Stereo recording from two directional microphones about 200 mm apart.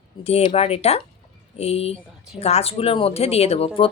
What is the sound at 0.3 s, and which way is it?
Speech, 30° left (ahead or behind).